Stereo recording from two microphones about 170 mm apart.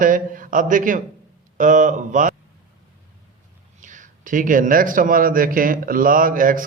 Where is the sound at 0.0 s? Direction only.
50° right (ahead or behind).